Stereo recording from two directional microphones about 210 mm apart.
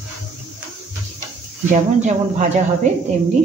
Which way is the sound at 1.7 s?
35° right (ahead or behind).